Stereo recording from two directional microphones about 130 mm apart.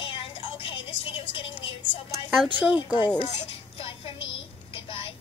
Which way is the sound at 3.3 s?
45° left (ahead or behind).